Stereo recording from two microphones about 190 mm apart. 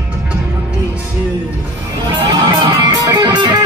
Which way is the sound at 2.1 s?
25° right (ahead or behind).